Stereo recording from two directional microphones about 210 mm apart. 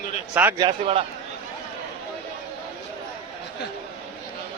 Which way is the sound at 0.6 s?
30° right (ahead or behind).